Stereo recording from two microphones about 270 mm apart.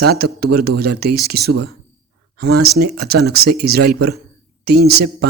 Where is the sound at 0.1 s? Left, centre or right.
Right.